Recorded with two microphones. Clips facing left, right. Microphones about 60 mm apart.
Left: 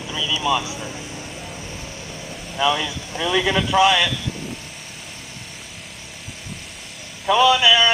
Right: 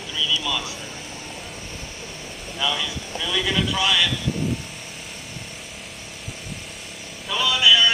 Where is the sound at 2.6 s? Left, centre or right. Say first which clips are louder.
Left 6 dB; left.